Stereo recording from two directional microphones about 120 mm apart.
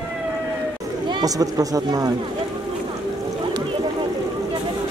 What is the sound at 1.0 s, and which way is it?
Speech, 35° right (ahead or behind).